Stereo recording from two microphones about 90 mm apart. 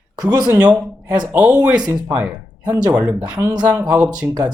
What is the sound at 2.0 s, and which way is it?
Speech, 15° right (ahead or behind).